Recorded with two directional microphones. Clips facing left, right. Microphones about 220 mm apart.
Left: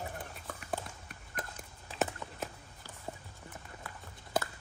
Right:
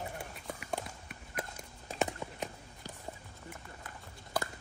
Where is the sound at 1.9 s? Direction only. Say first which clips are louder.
Even; 45° right (ahead or behind).